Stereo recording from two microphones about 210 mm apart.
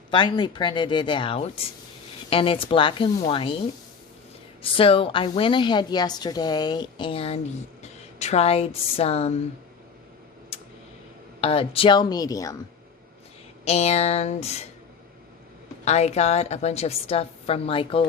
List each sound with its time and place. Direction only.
0.1 s a woman's voice: 20° left (ahead or behind)
4.6 s a woman's voice: 25° left (ahead or behind)
11.3 s a woman's voice: 25° left (ahead or behind)
13.7 s a sound: 30° left (ahead or behind)
15.8 s a woman's voice: 30° left (ahead or behind)